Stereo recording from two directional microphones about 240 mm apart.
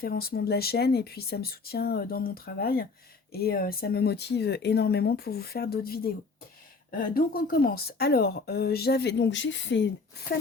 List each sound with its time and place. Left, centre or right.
0.0 s speech: left